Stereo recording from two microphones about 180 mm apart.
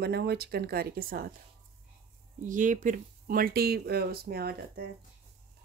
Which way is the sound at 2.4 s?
45° right (ahead or behind).